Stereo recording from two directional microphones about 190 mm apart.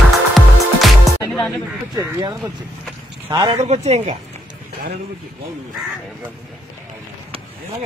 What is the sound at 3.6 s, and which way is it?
Speech, 35° right (ahead or behind).